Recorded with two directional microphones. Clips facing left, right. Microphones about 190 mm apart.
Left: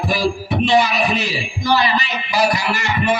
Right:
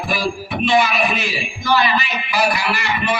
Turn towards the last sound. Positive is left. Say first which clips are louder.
# left 2 dB
turn(degrees=45)  # may be behind; listen again after turning